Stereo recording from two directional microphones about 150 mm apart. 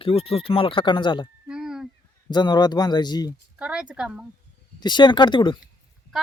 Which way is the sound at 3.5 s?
5° right (ahead or behind).